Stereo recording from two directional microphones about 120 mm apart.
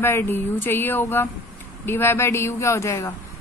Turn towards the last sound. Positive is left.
turn(degrees=25)  # may be behind; listen again after turning